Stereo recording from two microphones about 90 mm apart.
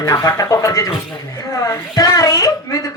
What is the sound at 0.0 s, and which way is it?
A woman's voice, 40° left (ahead or behind).